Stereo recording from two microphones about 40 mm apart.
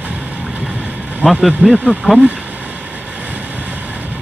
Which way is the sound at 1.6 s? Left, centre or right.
Right.